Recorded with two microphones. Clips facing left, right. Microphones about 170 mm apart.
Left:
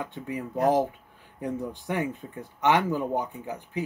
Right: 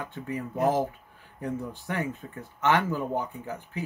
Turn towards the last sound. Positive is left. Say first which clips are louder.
# left 3 dB
turn(degrees=15)  # may be behind; listen again after turning